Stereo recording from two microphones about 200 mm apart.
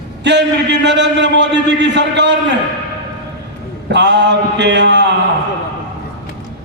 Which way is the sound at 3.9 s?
60° right (ahead or behind).